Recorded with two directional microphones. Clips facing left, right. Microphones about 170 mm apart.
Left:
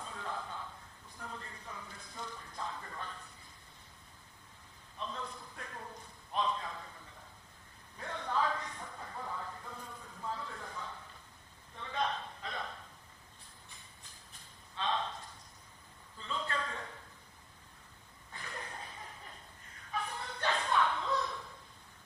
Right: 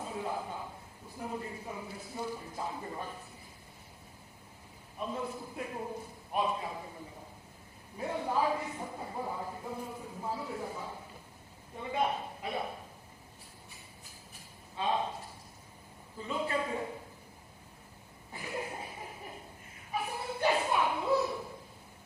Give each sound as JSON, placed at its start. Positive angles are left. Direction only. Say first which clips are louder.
{"t": 0.0, "sound": "a sound", "louder": "right 6 dB", "side_deg": -15}
{"t": 1.2, "sound": "a man's voice", "louder": "right 8 dB", "side_deg": -15}
{"t": 4.9, "sound": "a man's voice", "louder": "right 6 dB", "side_deg": -10}
{"t": 8.8, "sound": "speech", "louder": "right 6 dB", "side_deg": -25}
{"t": 10.2, "sound": "a man's voice", "louder": "right 5 dB", "side_deg": -10}
{"t": 14.8, "sound": "a sound", "louder": "right 4 dB", "side_deg": -10}
{"t": 16.1, "sound": "a man's voice", "louder": "right 5 dB", "side_deg": -10}
{"t": 18.3, "sound": "chuckle", "louder": "right 8 dB", "side_deg": -10}